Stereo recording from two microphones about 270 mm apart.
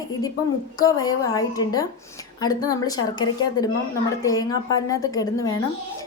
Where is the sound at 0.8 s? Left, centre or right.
Centre.